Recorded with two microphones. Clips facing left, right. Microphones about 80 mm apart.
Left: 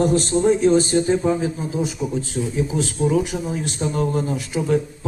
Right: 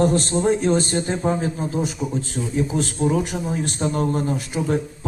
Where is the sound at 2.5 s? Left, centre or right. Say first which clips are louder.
Right 2 dB; right.